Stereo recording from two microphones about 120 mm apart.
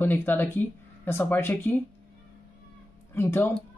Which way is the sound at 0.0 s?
15° left (ahead or behind).